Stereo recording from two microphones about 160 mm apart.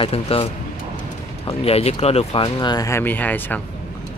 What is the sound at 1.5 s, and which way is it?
Speech, 40° left (ahead or behind).